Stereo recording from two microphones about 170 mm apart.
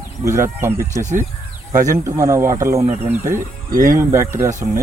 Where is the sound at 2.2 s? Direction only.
15° right (ahead or behind).